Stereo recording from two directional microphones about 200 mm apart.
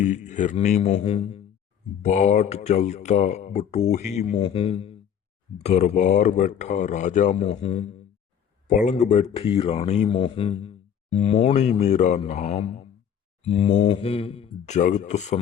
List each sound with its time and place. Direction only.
0.0 s speech: 35° left (ahead or behind)